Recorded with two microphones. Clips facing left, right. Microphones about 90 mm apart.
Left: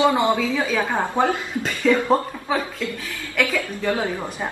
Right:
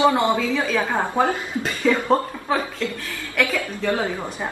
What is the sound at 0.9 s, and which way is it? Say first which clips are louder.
Speech: even; 5° right (ahead or behind).